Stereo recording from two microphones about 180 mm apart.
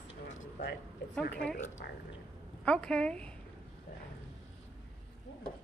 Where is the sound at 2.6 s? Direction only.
5° left (ahead or behind).